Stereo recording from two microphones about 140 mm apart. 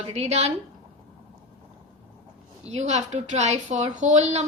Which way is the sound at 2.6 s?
50° right (ahead or behind).